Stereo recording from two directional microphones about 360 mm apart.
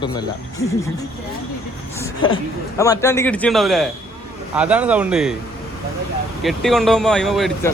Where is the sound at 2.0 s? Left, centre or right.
Centre.